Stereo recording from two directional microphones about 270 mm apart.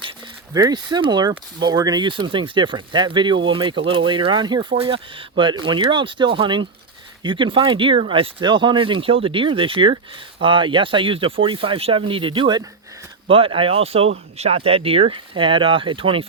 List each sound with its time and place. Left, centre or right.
0.5 s speech: centre